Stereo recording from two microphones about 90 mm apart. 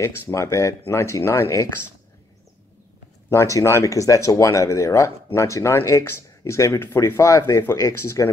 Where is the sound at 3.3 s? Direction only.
35° left (ahead or behind).